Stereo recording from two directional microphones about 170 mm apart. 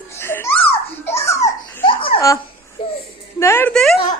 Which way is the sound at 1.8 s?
30° left (ahead or behind).